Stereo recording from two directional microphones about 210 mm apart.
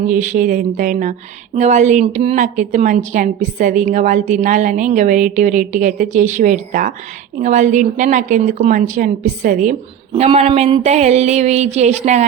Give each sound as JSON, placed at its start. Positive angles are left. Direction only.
{"t": 0.1, "sound": "a woman's voice", "side_deg": -35}
{"t": 10.1, "sound": "a woman's voice", "side_deg": -25}